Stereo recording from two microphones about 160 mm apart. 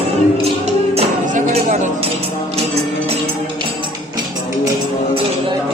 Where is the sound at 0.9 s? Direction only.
45° right (ahead or behind).